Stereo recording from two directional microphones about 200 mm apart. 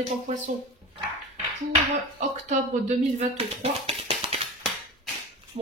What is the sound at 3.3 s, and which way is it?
Speech, 30° right (ahead or behind).